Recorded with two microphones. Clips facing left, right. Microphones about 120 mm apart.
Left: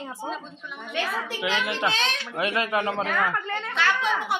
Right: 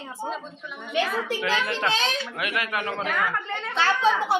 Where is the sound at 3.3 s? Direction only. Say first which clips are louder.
Left 1 dB; centre (ahead or behind).